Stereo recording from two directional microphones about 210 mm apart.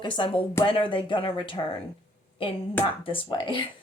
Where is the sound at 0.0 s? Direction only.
25° left (ahead or behind).